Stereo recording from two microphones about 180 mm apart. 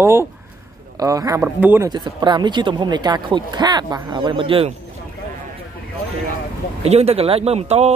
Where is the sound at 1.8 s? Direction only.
25° right (ahead or behind).